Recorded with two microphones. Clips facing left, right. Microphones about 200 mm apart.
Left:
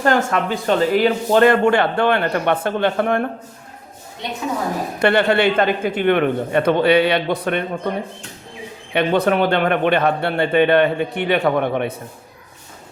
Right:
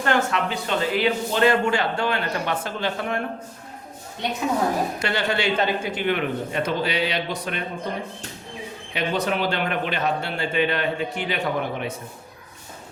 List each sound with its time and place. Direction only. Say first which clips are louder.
0.0 s speech: left 5 dB; 45° left (ahead or behind)
4.9 s speech: left 9 dB; 60° left (ahead or behind)
8.9 s speech: left 8 dB; 60° left (ahead or behind)